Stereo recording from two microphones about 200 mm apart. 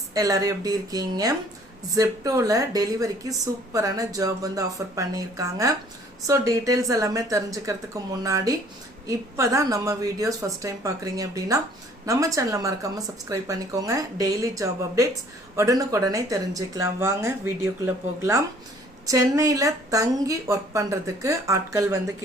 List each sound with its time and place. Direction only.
0.1 s a woman's voice: 15° right (ahead or behind)